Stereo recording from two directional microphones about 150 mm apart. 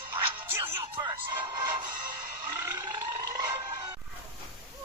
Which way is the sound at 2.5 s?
20° right (ahead or behind).